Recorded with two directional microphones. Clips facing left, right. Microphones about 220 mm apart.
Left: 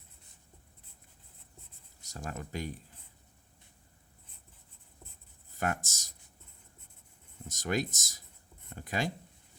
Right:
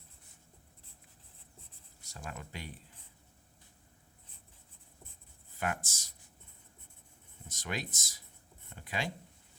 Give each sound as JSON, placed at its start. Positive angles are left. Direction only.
{"t": 2.0, "sound": "speech", "side_deg": 45}
{"t": 5.5, "sound": "speech", "side_deg": 45}
{"t": 7.4, "sound": "speech", "side_deg": 45}